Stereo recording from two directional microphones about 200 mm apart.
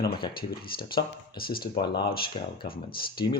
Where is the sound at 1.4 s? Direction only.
50° left (ahead or behind).